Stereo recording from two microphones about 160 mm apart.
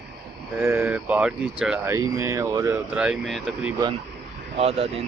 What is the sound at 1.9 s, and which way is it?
Speech, 20° right (ahead or behind).